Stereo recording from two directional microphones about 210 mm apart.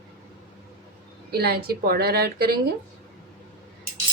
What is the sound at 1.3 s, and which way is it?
Speech, 50° right (ahead or behind).